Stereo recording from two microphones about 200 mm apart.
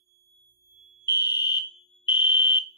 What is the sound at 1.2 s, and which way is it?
Fire alarm, 20° left (ahead or behind).